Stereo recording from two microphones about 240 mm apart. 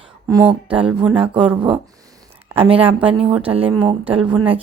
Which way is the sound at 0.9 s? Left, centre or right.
Centre.